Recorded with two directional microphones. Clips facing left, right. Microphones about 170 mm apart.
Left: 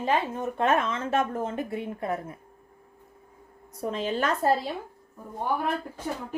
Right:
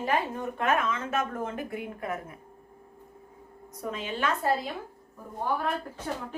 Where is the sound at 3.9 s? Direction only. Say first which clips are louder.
Left 3 dB; 40° left (ahead or behind).